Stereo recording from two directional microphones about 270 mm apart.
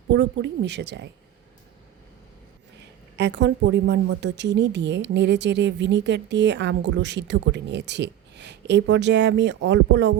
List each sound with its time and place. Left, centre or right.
0.1 s a woman's voice: right
3.2 s a woman's voice: right